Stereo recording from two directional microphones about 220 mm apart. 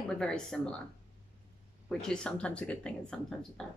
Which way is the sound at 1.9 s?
5° left (ahead or behind).